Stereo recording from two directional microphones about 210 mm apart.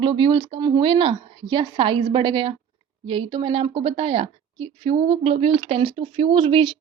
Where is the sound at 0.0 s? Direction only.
25° right (ahead or behind).